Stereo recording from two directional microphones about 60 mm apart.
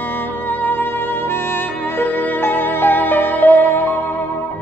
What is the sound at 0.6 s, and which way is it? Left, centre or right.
Music, left.